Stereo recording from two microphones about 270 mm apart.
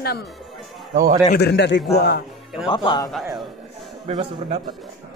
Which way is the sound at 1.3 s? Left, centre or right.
Left.